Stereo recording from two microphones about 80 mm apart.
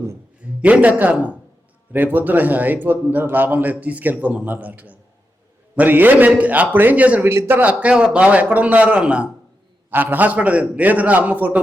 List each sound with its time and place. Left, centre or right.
0.4 s a man's voice: centre
7.3 s speech: right; by 9.3 s centre
9.9 s a man's voice: right